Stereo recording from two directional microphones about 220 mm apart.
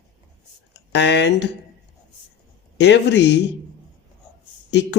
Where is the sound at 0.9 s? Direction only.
50° left (ahead or behind).